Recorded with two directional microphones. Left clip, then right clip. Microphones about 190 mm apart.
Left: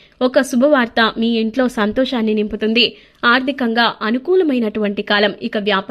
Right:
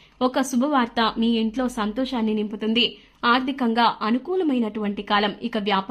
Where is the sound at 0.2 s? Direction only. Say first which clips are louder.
Left 8 dB; 15° left (ahead or behind).